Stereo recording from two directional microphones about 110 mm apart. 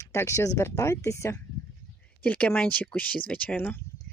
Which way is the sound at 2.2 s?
10° left (ahead or behind).